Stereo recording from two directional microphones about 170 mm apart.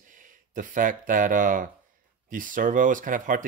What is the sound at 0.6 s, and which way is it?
Speech, 50° right (ahead or behind).